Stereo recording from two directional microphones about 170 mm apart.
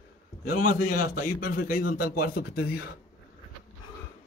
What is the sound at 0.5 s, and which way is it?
A man's voice, 50° left (ahead or behind).